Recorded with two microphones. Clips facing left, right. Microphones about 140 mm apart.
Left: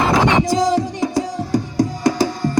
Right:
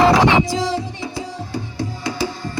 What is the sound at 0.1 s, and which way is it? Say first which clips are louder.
Music: right 1 dB; 45° left (ahead or behind).